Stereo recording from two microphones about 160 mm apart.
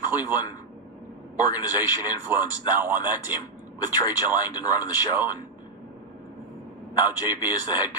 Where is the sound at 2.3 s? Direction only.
10° right (ahead or behind).